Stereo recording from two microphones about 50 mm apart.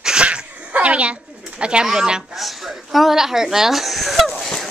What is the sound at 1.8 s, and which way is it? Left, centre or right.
Speech, centre.